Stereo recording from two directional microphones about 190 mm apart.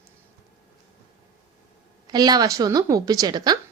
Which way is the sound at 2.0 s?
20° right (ahead or behind).